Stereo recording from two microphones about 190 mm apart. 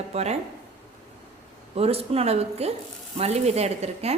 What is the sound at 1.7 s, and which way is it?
A woman's voice, 30° right (ahead or behind).